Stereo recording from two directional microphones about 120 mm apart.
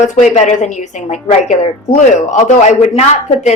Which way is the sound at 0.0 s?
90° left.